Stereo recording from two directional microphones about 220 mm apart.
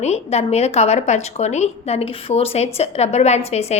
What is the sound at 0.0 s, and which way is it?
A woman's voice, 30° left (ahead or behind).